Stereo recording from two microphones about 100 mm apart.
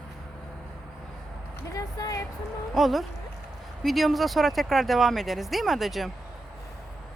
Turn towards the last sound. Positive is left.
turn(degrees=0)  # may be behind; listen again after turning